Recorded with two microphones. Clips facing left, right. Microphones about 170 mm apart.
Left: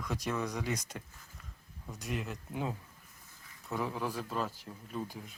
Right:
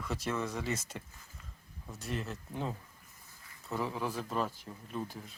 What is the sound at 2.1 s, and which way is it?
Speech, centre (ahead or behind).